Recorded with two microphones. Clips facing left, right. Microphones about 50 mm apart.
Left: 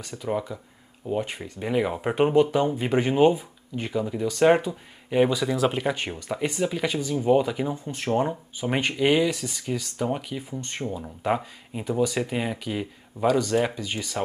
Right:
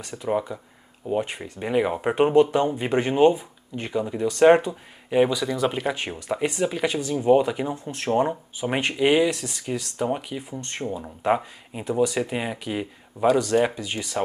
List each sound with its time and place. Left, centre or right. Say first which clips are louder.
0.1 s speech: right 3 dB; centre
5.3 s speech: even; centre